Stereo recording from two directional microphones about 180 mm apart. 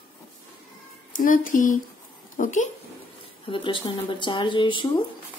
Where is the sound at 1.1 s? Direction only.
50° left (ahead or behind).